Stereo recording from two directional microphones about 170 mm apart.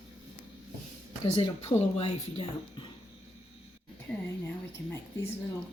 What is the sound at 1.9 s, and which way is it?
Speech, 35° left (ahead or behind).